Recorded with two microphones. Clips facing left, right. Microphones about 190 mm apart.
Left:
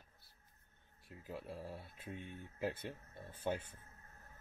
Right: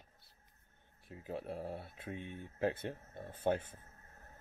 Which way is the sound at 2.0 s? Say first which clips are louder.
Right 4 dB; 20° right (ahead or behind).